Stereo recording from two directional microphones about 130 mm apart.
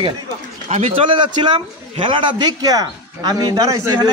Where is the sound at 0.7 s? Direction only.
50° right (ahead or behind); by 4.0 s 25° right (ahead or behind).